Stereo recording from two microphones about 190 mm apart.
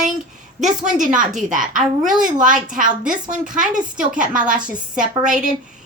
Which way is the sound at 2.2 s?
45° right (ahead or behind).